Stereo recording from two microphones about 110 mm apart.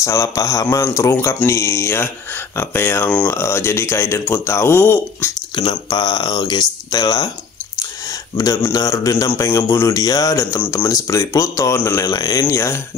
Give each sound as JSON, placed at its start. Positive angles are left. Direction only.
{"t": 0.0, "sound": "speech", "side_deg": 30}
{"t": 5.7, "sound": "speech", "side_deg": 40}
{"t": 8.7, "sound": "speech", "side_deg": 30}